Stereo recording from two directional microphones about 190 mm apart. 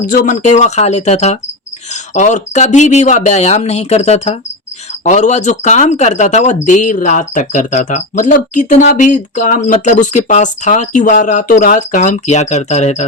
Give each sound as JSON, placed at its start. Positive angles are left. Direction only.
{"t": 0.1, "sound": "speech", "side_deg": 40}